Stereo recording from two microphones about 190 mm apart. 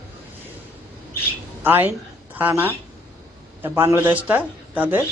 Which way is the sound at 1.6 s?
10° right (ahead or behind).